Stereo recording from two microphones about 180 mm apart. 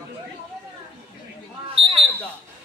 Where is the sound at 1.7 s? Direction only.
30° right (ahead or behind).